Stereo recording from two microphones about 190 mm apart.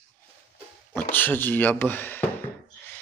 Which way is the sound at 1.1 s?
10° left (ahead or behind).